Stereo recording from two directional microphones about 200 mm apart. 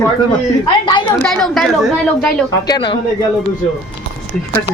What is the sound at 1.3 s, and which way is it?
A woman's voice, centre (ahead or behind).